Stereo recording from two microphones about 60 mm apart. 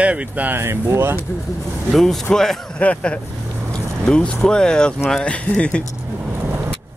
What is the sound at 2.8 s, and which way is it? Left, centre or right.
Speech, left.